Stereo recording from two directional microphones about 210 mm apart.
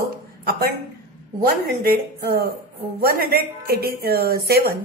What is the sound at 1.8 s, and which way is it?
A woman's voice, 45° right (ahead or behind).